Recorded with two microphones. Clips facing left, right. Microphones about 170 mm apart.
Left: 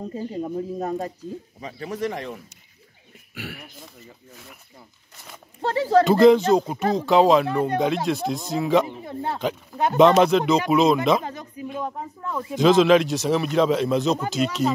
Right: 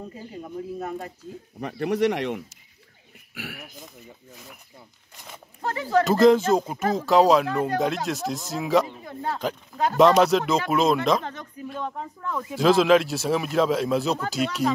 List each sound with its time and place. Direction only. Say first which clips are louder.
0.1 s speech: left 8 dB; 35° left (ahead or behind)
1.6 s speech: right 6 dB; 70° right (ahead or behind)
3.3 s speech: left 1 dB; 5° right (ahead or behind)
5.6 s speech: left 4 dB; 30° left (ahead or behind)
6.0 s speech: left 1 dB; centre (ahead or behind)
8.8 s speech: left 2 dB; 25° left (ahead or behind)
9.9 s speech: left 2 dB; centre (ahead or behind)
12.4 s speech: left 2 dB; 5° right (ahead or behind)